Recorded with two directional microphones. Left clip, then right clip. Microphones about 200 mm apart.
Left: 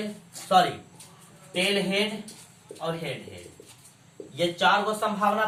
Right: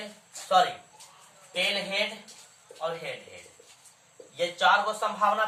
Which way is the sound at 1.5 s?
10° right (ahead or behind).